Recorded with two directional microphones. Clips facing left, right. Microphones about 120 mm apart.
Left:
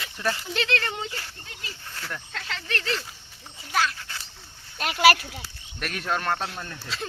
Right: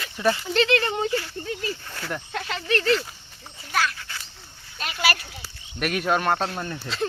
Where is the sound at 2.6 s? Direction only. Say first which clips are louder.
Right 9 dB; centre (ahead or behind).